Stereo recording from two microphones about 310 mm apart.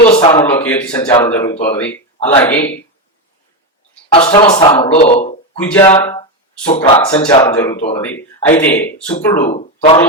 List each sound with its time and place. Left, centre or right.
0.2 s speech: centre
0.4 s a man's voice: centre
1.5 s speech: left
1.8 s a man's voice: centre
4.3 s a man's voice: centre
5.5 s speech: centre
7.8 s speech: left
8.0 s a man's voice: centre
9.5 s speech: left